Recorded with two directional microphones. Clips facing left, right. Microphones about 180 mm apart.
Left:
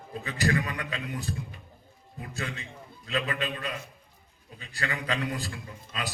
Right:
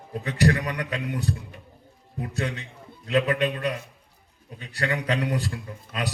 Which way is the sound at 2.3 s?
70° right (ahead or behind).